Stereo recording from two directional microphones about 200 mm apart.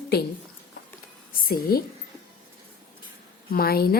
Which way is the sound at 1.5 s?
50° left (ahead or behind).